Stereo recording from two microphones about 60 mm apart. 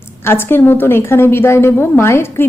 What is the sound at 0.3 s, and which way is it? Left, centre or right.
A woman's voice, left.